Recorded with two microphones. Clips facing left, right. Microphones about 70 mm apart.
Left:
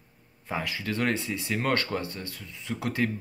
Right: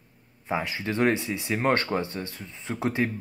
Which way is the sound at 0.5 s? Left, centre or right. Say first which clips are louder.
Right 3 dB; right.